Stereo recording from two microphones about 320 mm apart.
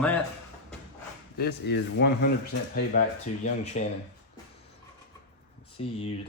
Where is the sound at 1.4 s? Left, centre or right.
Left.